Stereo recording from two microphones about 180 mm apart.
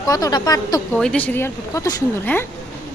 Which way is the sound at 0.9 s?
5° left (ahead or behind).